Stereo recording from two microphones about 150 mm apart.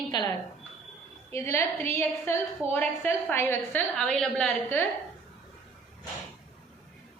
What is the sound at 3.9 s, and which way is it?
Speech, 5° left (ahead or behind).